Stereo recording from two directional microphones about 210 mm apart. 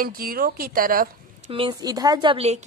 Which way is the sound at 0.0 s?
45° right (ahead or behind).